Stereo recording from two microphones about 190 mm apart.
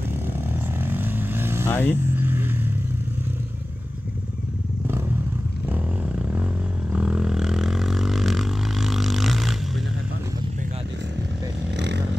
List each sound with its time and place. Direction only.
0.7 s vehicle: 10° right (ahead or behind)
1.7 s speech: 10° left (ahead or behind)
2.1 s vehicle: 10° right (ahead or behind)
4.8 s vehicle: 10° right (ahead or behind)
5.7 s a sound: 5° right (ahead or behind)
11.7 s vehicle: 65° right (ahead or behind)